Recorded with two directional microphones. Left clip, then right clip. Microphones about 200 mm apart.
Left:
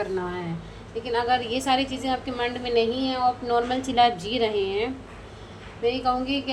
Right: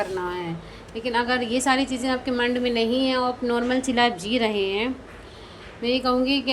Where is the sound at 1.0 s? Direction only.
35° right (ahead or behind).